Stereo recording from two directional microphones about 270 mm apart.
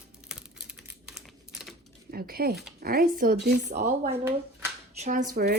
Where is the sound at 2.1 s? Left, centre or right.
Right.